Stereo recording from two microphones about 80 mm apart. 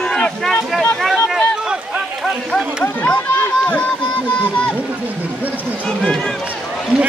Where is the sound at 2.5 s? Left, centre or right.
Centre.